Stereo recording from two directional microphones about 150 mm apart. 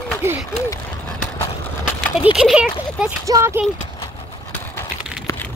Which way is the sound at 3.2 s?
20° right (ahead or behind).